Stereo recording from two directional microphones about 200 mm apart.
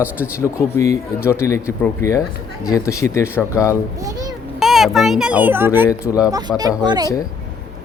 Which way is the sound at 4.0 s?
20° right (ahead or behind).